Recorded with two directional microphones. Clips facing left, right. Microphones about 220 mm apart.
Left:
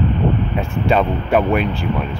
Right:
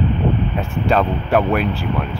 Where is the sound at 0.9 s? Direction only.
5° left (ahead or behind).